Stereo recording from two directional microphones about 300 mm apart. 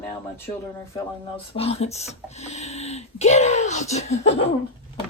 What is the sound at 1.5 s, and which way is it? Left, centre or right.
Speech, centre.